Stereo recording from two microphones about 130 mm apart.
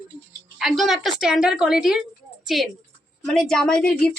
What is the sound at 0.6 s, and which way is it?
A woman's voice, centre (ahead or behind).